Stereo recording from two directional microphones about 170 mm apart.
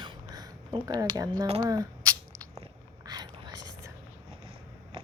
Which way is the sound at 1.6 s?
20° right (ahead or behind).